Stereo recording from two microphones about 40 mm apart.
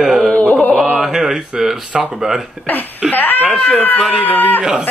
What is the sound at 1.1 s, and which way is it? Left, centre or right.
Speech, centre.